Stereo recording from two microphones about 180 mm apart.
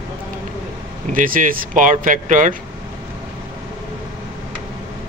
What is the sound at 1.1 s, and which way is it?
Speech, 50° right (ahead or behind).